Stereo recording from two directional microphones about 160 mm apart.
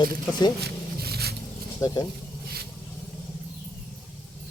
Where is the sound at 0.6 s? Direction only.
90° right.